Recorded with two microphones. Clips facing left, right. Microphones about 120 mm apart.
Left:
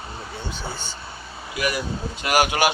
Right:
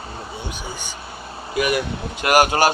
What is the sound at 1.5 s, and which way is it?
Speech, 55° right (ahead or behind).